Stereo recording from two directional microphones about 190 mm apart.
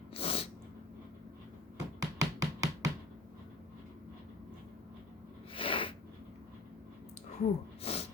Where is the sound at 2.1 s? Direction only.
70° right (ahead or behind).